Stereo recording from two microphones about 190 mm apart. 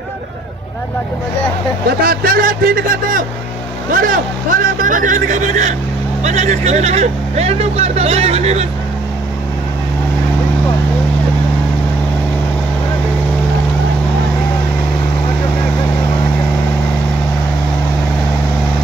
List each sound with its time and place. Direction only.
1.9 s speech: 50° right (ahead or behind); by 8.6 s 35° right (ahead or behind)